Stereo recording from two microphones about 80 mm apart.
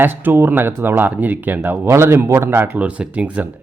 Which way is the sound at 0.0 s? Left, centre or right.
Right.